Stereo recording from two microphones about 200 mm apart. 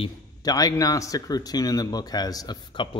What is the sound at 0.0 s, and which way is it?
A man's voice, 20° left (ahead or behind).